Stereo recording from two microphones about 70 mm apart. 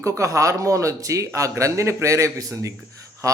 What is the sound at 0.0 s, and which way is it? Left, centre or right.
Speech, right.